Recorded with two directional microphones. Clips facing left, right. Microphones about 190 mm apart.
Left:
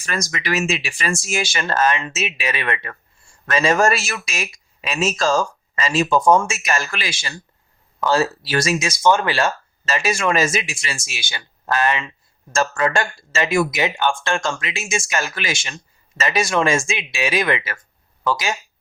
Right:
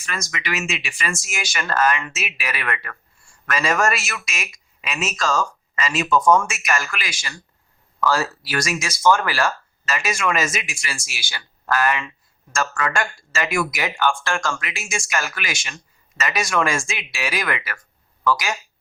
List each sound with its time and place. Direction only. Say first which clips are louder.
0.0 s speech: left 4 dB; 40° left (ahead or behind)